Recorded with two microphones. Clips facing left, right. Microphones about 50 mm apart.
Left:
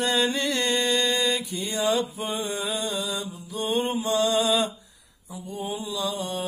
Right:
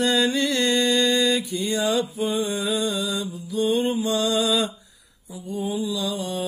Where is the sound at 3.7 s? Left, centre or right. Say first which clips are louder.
Right 1 dB; left.